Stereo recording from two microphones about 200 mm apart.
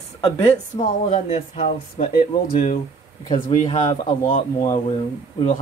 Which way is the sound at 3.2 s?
20° left (ahead or behind).